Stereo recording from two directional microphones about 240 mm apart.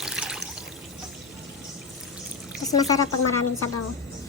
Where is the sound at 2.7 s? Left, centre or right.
Centre.